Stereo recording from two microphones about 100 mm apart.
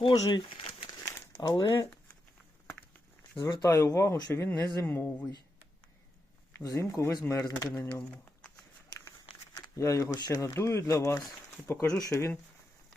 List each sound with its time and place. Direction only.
0.0 s speech: 55° left (ahead or behind)
1.4 s speech: 40° left (ahead or behind)
3.4 s speech: 35° left (ahead or behind)
6.6 s speech: 35° left (ahead or behind)
7.9 s a sound: 20° left (ahead or behind)
9.6 s speech: 35° left (ahead or behind)